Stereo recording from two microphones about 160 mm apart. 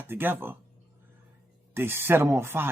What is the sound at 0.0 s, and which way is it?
Speech, 15° right (ahead or behind).